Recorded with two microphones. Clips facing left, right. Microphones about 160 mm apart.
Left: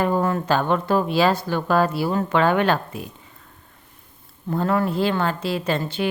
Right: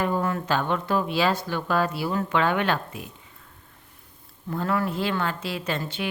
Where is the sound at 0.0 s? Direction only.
40° left (ahead or behind).